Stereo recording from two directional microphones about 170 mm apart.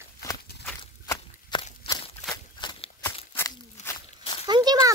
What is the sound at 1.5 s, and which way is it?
Walk, 25° left (ahead or behind).